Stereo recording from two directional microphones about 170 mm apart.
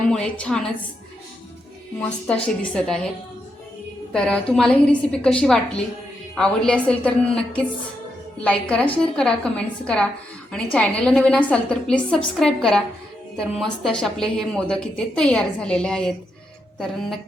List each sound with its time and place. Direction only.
0.1 s speech: 5° left (ahead or behind)
2.0 s speech: 5° left (ahead or behind)
4.1 s speech: 5° left (ahead or behind)